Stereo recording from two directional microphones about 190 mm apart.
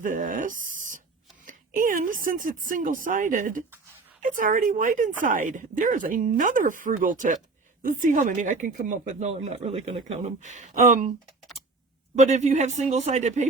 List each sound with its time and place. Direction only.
0.0 s a sound: 45° right (ahead or behind)
1.5 s speech: 45° right (ahead or behind)
12.1 s speech: 35° right (ahead or behind)